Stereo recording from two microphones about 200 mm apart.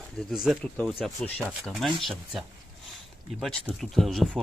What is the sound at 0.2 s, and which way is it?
Speech, centre (ahead or behind).